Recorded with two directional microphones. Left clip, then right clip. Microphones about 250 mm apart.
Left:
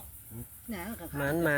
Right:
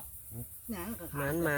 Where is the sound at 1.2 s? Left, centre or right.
Centre.